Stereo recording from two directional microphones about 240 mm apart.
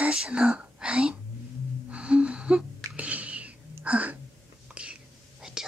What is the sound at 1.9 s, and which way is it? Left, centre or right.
Sneeze, centre.